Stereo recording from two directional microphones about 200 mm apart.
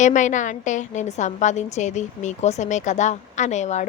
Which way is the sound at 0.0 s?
35° left (ahead or behind).